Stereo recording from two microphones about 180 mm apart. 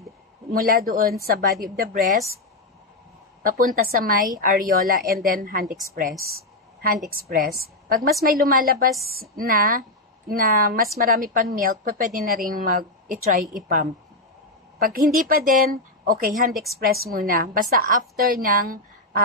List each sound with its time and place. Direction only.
0.5 s a woman's voice: 50° right (ahead or behind)
3.4 s a woman's voice: 50° right (ahead or behind)
7.1 s a woman's voice: 55° right (ahead or behind)
14.8 s a woman's voice: 55° right (ahead or behind)